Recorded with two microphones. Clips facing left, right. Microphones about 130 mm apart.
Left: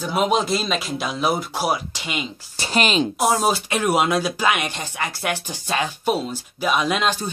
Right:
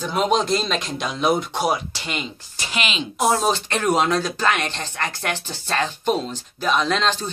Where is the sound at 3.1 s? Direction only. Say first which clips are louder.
Even; 5° left (ahead or behind).